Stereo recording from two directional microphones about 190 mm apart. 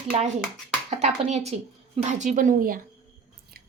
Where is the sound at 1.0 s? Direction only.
35° right (ahead or behind).